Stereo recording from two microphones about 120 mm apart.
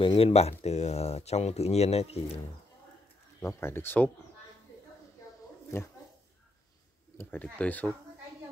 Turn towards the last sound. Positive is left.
turn(degrees=15)  # may be behind; listen again after turning